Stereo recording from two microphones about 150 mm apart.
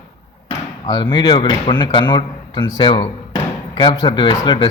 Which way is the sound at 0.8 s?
30° left (ahead or behind).